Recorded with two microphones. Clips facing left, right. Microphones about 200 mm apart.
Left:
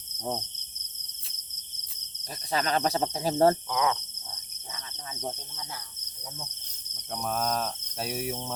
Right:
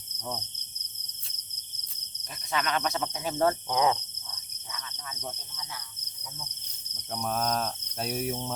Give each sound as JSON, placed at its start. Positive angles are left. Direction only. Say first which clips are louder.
{"t": 2.5, "sound": "speech", "louder": "left 3 dB", "side_deg": 35}
{"t": 3.7, "sound": "speech", "louder": "right 2 dB", "side_deg": -25}
{"t": 4.7, "sound": "speech", "louder": "even", "side_deg": 30}
{"t": 6.9, "sound": "cricket", "louder": "even", "side_deg": 0}